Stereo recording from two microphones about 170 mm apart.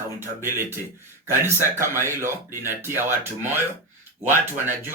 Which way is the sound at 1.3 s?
15° right (ahead or behind).